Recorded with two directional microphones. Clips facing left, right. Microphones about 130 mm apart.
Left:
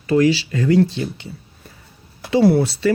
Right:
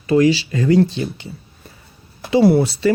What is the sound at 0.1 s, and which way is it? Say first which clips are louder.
Speech: right 1 dB; 20° right (ahead or behind).